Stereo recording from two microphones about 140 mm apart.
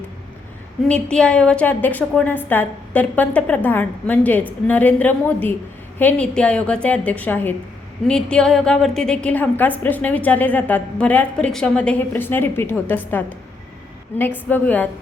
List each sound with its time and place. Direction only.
0.9 s a woman's voice: 5° left (ahead or behind)
14.2 s a woman's voice: 15° left (ahead or behind)